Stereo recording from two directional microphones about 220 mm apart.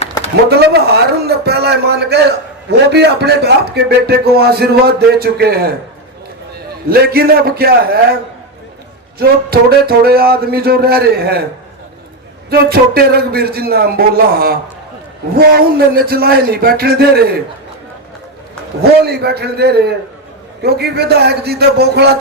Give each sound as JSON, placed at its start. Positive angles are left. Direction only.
{"t": 0.2, "sound": "a sound", "side_deg": 15}
{"t": 0.5, "sound": "a man's voice", "side_deg": -45}
{"t": 6.9, "sound": "a man's voice", "side_deg": -45}
{"t": 9.1, "sound": "a man's voice", "side_deg": -45}
{"t": 12.5, "sound": "a man's voice", "side_deg": -45}
{"t": 18.8, "sound": "a man's voice", "side_deg": -45}